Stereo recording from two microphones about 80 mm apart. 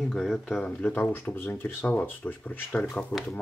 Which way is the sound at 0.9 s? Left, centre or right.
Left.